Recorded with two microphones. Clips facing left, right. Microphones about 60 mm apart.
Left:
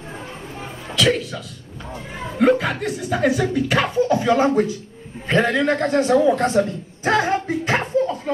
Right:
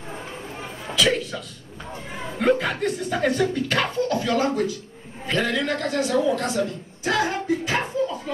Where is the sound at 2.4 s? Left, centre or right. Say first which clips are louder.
Left 4 dB; centre.